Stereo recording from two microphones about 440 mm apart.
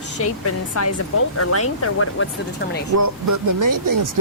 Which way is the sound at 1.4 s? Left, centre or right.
Left.